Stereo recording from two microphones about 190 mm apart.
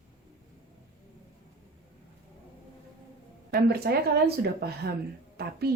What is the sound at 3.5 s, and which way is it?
A woman's voice, 55° right (ahead or behind).